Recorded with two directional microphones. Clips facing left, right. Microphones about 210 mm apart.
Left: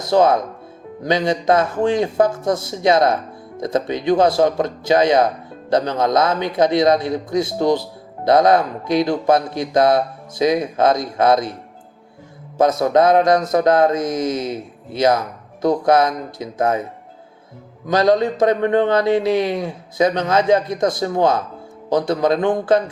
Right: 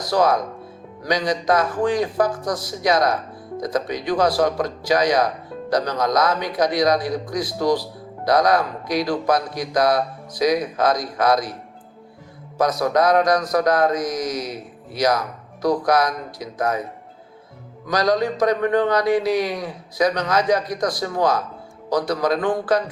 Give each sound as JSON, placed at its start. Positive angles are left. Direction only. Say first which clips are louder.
{"t": 0.0, "sound": "speech", "louder": "left 4 dB", "side_deg": 25}
{"t": 12.5, "sound": "speech", "louder": "left 4 dB", "side_deg": 25}
{"t": 17.8, "sound": "speech", "louder": "left 4 dB", "side_deg": 25}